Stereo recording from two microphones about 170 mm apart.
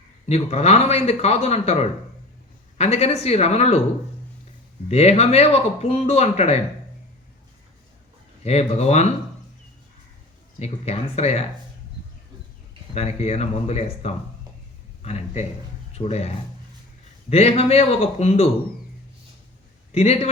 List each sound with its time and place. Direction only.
0.3 s speech: 40° left (ahead or behind)
4.9 s speech: 40° left (ahead or behind)
8.4 s speech: 40° left (ahead or behind)
10.6 s speech: 40° left (ahead or behind)
12.9 s speech: 40° left (ahead or behind)
19.9 s speech: 40° left (ahead or behind)